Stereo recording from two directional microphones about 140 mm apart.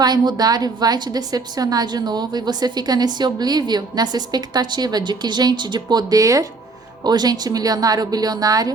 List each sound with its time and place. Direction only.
0.0 s a woman's voice: 30° right (ahead or behind)